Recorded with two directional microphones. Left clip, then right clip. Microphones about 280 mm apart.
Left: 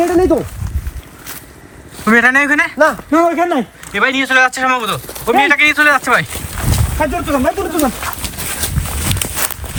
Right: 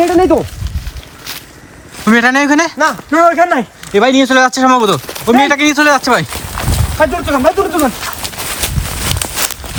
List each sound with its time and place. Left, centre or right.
0.0 s speech: centre
2.0 s speech: centre
2.7 s a man's voice: right
3.9 s speech: centre
7.0 s a man's voice: right
7.7 s a sound: centre